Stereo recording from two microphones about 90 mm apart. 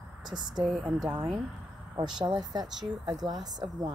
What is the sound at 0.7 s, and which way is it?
Speech, 5° right (ahead or behind).